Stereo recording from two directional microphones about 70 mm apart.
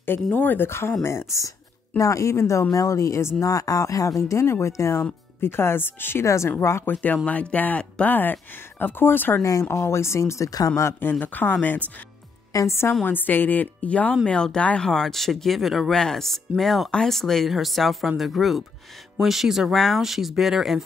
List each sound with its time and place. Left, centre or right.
0.0 s speech: left
0.7 s a woman's voice: left
3.4 s a woman's voice: left
6.2 s a woman's voice: left
6.9 s speech: left
9.4 s speech: left
11.0 s speech: left
12.5 s a woman's voice: left
13.0 s speech: left; by 20.8 s centre